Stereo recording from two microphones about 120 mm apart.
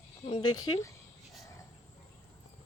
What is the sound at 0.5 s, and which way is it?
Speech, 30° left (ahead or behind).